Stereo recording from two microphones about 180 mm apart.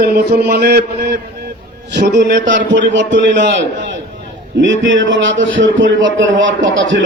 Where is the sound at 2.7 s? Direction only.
80° right.